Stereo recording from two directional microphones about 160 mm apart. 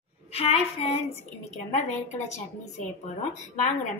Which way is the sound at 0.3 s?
40° left (ahead or behind).